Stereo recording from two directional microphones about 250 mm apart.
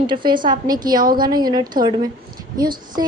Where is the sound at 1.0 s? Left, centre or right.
Right.